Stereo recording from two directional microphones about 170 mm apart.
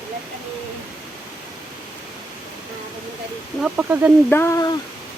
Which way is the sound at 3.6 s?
10° right (ahead or behind).